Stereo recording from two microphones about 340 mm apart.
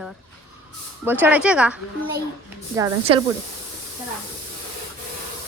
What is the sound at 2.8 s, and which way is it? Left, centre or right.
Speech, centre.